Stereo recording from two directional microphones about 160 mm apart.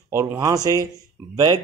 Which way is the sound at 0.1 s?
15° right (ahead or behind).